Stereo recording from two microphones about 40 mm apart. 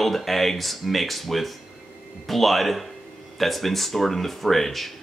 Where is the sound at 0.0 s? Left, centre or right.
Centre.